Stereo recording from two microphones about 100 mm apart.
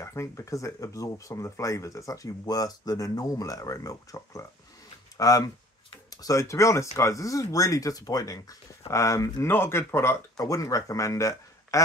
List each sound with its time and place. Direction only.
0.0 s a man's voice: 30° left (ahead or behind)